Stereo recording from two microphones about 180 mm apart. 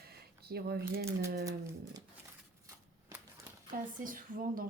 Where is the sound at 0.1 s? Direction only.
60° right (ahead or behind).